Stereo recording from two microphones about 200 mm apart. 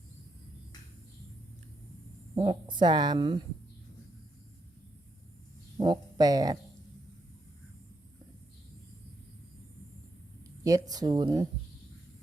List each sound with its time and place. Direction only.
2.3 s speech: 20° right (ahead or behind)
5.7 s speech: 20° right (ahead or behind)
10.6 s speech: 15° right (ahead or behind)